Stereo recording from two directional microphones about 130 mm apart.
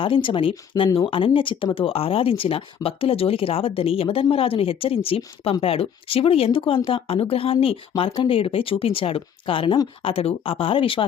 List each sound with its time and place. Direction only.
0.0 s speech: 40° left (ahead or behind)